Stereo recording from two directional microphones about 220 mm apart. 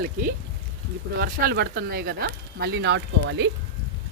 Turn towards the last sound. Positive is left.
turn(degrees=-50)  # may be behind; listen again after turning